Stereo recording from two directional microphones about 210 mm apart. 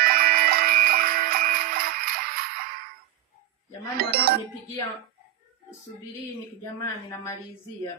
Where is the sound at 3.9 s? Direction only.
50° right (ahead or behind).